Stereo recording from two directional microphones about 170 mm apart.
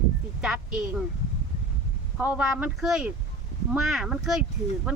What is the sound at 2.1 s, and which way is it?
Speech, 5° right (ahead or behind).